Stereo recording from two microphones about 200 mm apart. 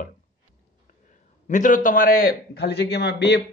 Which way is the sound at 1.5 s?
40° left (ahead or behind).